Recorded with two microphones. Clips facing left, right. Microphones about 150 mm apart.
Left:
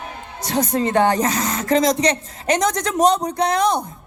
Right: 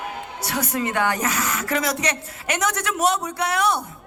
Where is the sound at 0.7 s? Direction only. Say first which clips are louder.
Left 6 dB; 35° left (ahead or behind).